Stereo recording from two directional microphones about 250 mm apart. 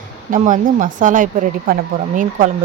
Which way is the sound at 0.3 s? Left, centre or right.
Right.